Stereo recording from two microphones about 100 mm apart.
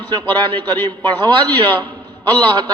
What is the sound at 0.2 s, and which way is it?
A man's voice, 20° left (ahead or behind).